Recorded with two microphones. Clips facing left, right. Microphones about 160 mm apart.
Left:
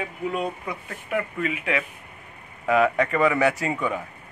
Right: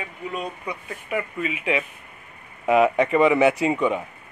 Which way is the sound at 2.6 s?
25° right (ahead or behind).